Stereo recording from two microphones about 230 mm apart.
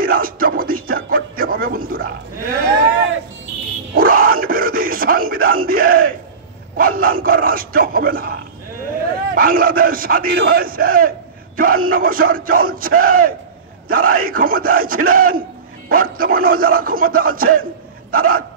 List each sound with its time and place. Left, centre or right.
0.0 s music: right
3.9 s a sound: right
6.8 s speech: right